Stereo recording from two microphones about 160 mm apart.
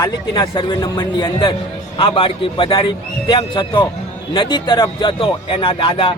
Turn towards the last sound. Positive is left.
turn(degrees=35)  # may be behind; listen again after turning